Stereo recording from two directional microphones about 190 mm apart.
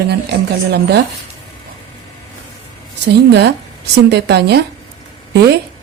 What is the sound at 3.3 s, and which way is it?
Speech, 60° right (ahead or behind).